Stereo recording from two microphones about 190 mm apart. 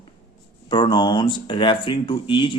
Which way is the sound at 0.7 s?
25° left (ahead or behind).